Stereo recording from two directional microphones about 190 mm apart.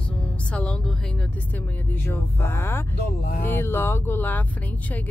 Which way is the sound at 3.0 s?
55° left (ahead or behind).